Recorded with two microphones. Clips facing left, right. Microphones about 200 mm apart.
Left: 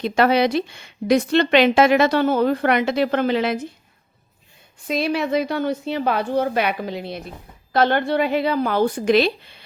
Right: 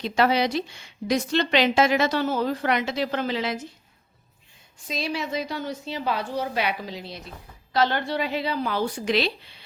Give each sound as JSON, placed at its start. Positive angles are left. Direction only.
{"t": 0.0, "sound": "speech", "side_deg": 55}
{"t": 4.9, "sound": "a woman's voice", "side_deg": 60}